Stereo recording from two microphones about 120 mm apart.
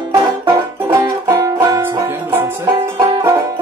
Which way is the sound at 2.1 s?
15° right (ahead or behind).